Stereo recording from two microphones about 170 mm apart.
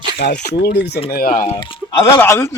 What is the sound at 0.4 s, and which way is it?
Speech, 75° left (ahead or behind).